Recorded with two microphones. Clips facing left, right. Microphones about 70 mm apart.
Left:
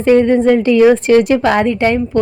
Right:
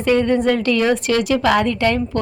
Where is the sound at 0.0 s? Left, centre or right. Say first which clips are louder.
Left 6 dB; left.